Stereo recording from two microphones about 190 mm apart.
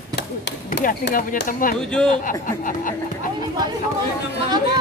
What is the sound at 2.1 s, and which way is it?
Speech, 45° left (ahead or behind).